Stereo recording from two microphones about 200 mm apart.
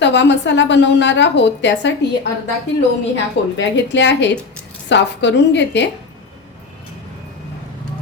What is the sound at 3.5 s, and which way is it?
A woman's voice, 65° left (ahead or behind).